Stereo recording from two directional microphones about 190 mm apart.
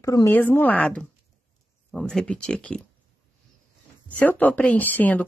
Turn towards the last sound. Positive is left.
turn(degrees=10)  # may be behind; listen again after turning